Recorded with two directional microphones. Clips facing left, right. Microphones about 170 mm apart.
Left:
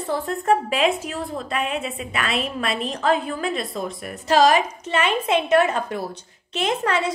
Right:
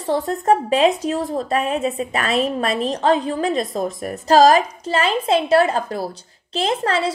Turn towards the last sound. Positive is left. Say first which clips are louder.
# right 2 dB
turn(degrees=-30)  # may be behind; listen again after turning